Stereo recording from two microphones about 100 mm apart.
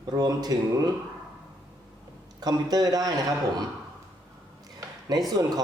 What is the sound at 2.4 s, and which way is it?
Speech, 40° right (ahead or behind).